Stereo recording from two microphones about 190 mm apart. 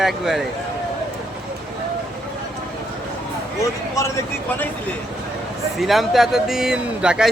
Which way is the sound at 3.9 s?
15° left (ahead or behind).